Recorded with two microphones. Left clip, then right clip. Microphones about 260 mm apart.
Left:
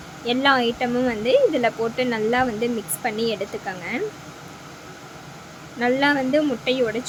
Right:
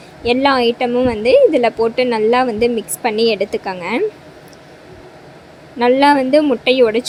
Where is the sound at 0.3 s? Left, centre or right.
Centre.